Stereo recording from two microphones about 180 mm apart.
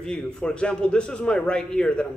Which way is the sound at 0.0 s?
5° left (ahead or behind).